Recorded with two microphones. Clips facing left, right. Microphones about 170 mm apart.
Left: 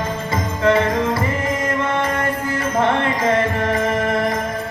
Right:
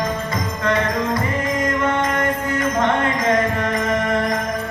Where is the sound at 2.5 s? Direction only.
30° left (ahead or behind).